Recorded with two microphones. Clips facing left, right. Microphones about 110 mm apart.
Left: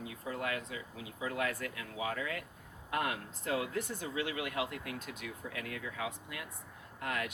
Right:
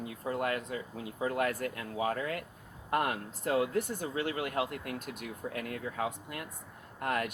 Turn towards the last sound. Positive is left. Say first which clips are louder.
# right 5 dB
turn(degrees=-50)  # may be behind; listen again after turning